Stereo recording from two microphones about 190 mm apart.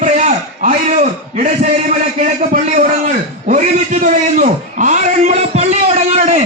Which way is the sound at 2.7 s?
40° right (ahead or behind).